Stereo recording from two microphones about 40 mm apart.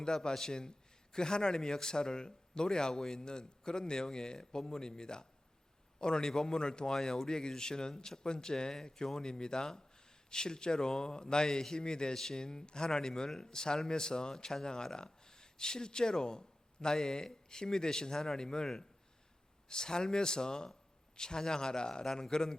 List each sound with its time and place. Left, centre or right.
0.0 s a man's voice: centre